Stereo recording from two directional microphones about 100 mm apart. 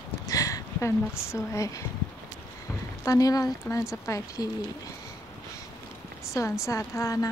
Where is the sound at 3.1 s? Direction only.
35° left (ahead or behind).